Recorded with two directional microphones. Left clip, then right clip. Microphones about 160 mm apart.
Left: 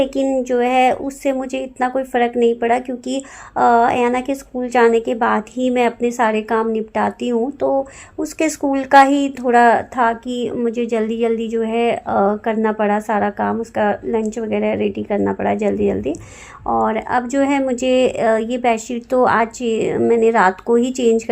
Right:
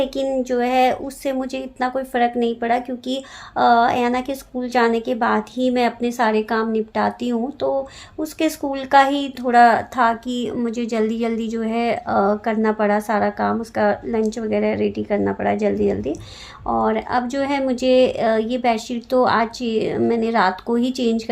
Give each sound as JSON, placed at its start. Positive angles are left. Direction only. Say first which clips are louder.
{"t": 0.0, "sound": "a woman's voice", "louder": "left 3 dB", "side_deg": 30}
{"t": 8.2, "sound": "speech", "louder": "left 3 dB", "side_deg": 35}